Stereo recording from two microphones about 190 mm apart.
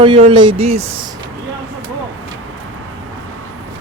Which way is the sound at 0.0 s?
30° right (ahead or behind).